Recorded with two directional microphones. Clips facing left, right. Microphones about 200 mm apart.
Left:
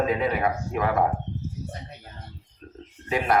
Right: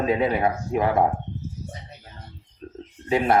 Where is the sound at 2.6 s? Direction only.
30° right (ahead or behind).